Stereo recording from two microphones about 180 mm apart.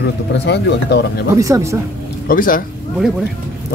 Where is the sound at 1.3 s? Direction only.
15° right (ahead or behind).